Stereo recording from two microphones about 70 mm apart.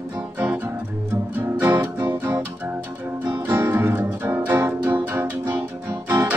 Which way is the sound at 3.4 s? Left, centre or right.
Right.